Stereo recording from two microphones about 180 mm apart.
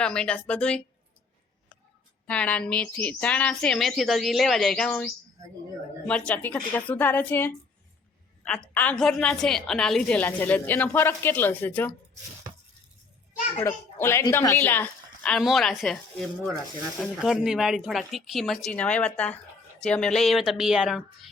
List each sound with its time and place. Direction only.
0.0 s speech: 5° left (ahead or behind)
2.2 s a woman's voice: 5° left (ahead or behind)
13.6 s a woman's voice: 15° left (ahead or behind); by 21.2 s centre (ahead or behind)